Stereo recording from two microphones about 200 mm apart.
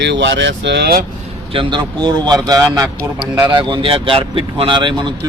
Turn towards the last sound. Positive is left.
turn(degrees=-25)  # may be behind; listen again after turning